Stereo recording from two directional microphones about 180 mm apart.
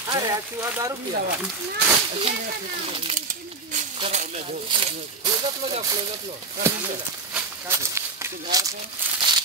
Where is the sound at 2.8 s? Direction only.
30° right (ahead or behind).